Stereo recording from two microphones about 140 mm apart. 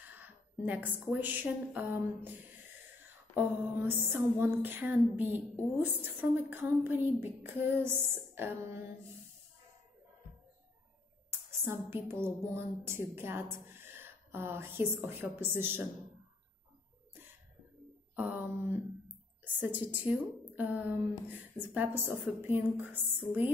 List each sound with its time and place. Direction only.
0.1 s a sound: 10° right (ahead or behind)
0.9 s a woman's voice: 15° right (ahead or behind)
3.3 s a woman's voice: 15° right (ahead or behind)
11.2 s music: 15° right (ahead or behind)
18.1 s mantra: 10° right (ahead or behind)
19.4 s a woman's voice: 10° right (ahead or behind)